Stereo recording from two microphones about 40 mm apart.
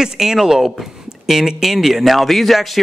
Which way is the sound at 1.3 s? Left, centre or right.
Centre.